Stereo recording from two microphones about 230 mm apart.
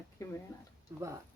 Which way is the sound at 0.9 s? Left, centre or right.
Centre.